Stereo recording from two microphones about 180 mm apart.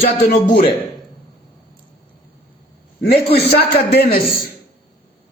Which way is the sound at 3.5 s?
60° left (ahead or behind).